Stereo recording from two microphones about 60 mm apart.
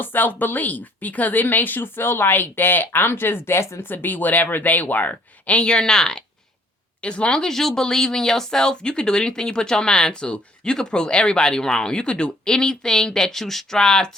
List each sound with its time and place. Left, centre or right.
0.0 s speech: left; by 14.1 s centre